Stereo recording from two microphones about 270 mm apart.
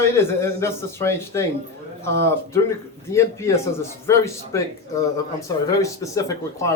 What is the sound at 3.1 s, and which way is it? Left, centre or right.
Speech, centre.